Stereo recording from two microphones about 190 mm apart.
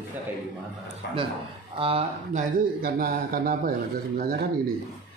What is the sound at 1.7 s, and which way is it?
Speech, 30° right (ahead or behind).